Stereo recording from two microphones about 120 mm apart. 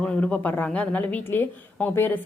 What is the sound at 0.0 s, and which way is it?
A woman's voice, 10° left (ahead or behind).